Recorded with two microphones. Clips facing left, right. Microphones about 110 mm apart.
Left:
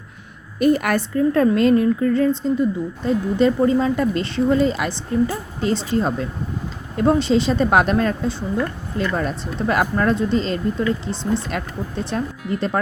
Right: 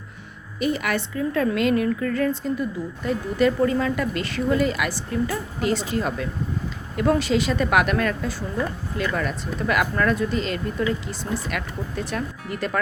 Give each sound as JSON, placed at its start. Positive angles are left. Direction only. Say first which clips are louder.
{"t": 0.6, "sound": "a woman's voice", "louder": "left 7 dB", "side_deg": 45}